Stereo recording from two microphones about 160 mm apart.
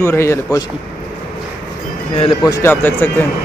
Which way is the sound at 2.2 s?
30° left (ahead or behind).